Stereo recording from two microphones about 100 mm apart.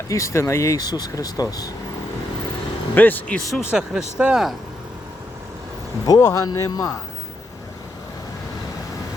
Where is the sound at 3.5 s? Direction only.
5° right (ahead or behind).